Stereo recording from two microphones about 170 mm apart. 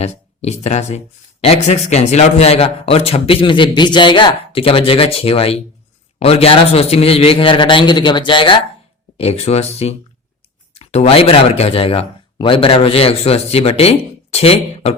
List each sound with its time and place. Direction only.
0.0 s speech: 40° left (ahead or behind)